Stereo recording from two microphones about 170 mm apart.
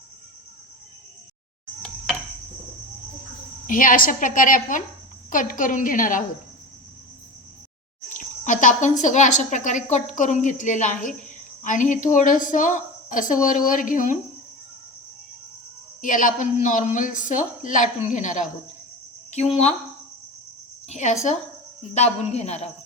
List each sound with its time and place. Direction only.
3.7 s a woman's voice: 50° left (ahead or behind)
8.1 s a woman's voice: 45° left (ahead or behind)
16.0 s a woman's voice: 50° left (ahead or behind)
20.8 s a woman's voice: 45° left (ahead or behind)